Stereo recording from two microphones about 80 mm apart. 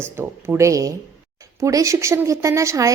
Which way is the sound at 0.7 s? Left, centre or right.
Right.